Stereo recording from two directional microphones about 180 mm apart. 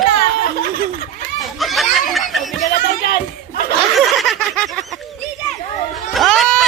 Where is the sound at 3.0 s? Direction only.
60° left (ahead or behind).